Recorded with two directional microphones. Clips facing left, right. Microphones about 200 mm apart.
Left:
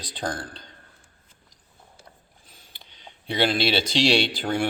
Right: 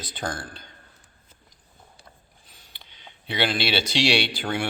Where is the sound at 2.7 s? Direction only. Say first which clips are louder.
Left 2 dB; 45° left (ahead or behind).